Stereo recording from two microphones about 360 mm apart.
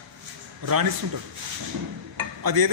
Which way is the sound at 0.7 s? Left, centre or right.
Right.